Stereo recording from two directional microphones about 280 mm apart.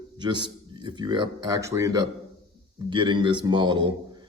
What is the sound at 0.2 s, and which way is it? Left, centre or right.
A man's voice, centre.